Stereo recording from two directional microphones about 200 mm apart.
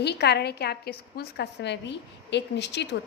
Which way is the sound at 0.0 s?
55° left (ahead or behind).